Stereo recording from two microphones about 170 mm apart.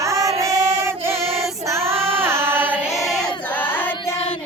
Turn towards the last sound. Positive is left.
turn(degrees=10)  # may be behind; listen again after turning